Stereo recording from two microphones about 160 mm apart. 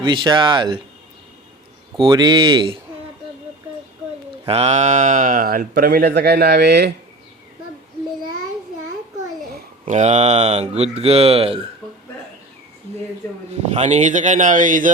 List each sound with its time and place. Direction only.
0.0 s speech: 30° right (ahead or behind)
2.0 s speech: 30° right (ahead or behind)
4.4 s speech: 40° right (ahead or behind); by 6.9 s 90° right
9.8 s speech: 45° right (ahead or behind)
13.5 s speech: 45° right (ahead or behind)